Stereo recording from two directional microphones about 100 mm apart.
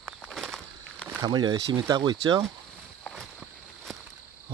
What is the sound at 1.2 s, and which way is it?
Speech, 45° right (ahead or behind).